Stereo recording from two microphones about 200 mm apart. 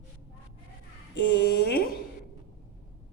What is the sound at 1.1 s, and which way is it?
Speech, 55° left (ahead or behind).